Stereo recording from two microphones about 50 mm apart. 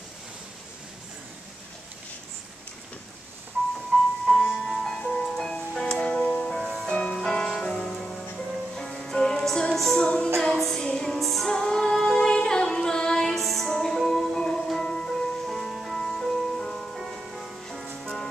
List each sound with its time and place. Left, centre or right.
4.3 s music: centre
4.8 s music: centre
5.5 s music: centre
6.5 s music: centre
6.9 s music: left; by 10.0 s centre
10.0 s music: centre
10.3 s music: centre
11.5 s female singing: centre
14.7 s music: centre
17.4 s music: centre
18.0 s music: centre